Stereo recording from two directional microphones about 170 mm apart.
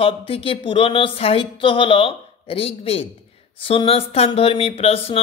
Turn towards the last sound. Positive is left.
turn(degrees=35)  # may be behind; listen again after turning